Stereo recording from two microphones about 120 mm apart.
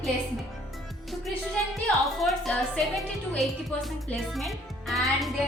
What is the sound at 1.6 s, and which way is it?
Speech, 10° left (ahead or behind).